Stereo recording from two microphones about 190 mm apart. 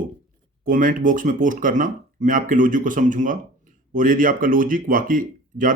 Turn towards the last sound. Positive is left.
turn(degrees=-45)  # may be behind; listen again after turning